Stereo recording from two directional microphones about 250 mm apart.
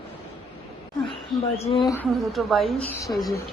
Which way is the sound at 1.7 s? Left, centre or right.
Centre.